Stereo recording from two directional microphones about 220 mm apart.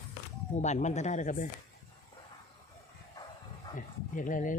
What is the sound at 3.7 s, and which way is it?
Dog, 35° left (ahead or behind).